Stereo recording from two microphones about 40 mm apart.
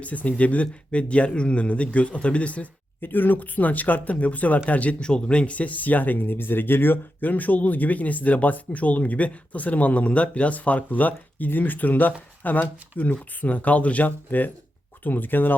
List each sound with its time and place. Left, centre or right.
0.0 s speech: left
3.0 s speech: left
14.3 s speech: left